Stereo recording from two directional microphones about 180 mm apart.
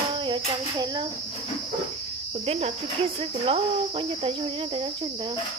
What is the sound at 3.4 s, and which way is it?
Speech, 30° right (ahead or behind).